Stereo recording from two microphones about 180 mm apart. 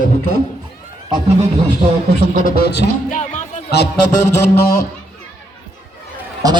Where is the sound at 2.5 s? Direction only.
60° left (ahead or behind).